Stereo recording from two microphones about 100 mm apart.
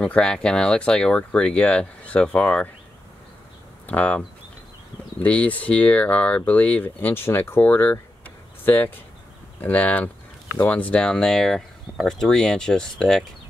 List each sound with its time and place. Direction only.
0.0 s speech: 10° left (ahead or behind)
3.8 s speech: 15° left (ahead or behind)
5.2 s speech: 15° left (ahead or behind)